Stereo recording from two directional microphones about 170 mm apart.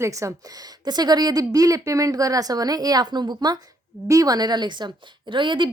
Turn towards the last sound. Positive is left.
turn(degrees=-30)  # may be behind; listen again after turning